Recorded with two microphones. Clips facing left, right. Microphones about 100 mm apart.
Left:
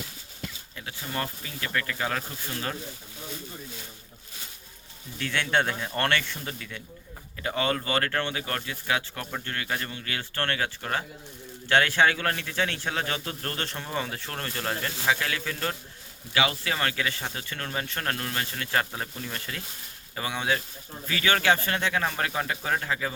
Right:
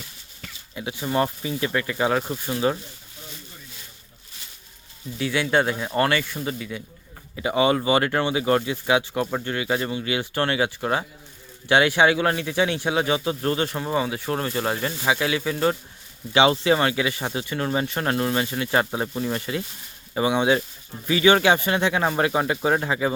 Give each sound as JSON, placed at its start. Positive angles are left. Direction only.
{"t": 0.8, "sound": "speech", "side_deg": -20}
{"t": 5.1, "sound": "a man's voice", "side_deg": -10}
{"t": 16.3, "sound": "a man's voice", "side_deg": -25}